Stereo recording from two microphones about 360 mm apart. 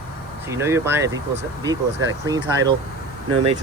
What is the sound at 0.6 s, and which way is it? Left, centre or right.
Speech, centre.